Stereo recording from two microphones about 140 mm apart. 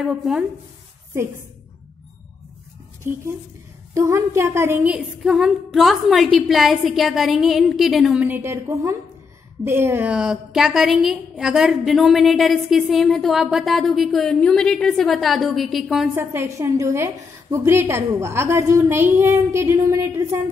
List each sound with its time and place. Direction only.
0.0 s a woman's voice: 5° right (ahead or behind)
3.9 s a woman's voice: 20° right (ahead or behind)
4.9 s a woman's voice: 5° right (ahead or behind)
16.2 s a woman's voice: 20° right (ahead or behind)